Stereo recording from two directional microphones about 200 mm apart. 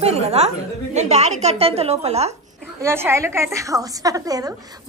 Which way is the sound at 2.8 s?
10° right (ahead or behind).